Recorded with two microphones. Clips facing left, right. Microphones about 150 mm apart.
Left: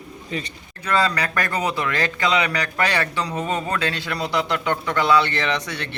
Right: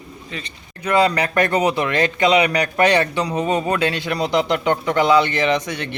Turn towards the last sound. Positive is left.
turn(degrees=-20)  # may be behind; listen again after turning